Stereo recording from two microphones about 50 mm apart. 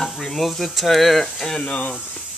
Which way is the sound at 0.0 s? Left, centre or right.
Centre.